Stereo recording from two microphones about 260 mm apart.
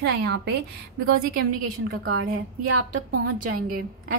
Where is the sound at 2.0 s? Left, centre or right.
Right.